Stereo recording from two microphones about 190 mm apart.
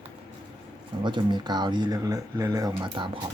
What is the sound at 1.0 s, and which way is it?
Speech, 25° right (ahead or behind).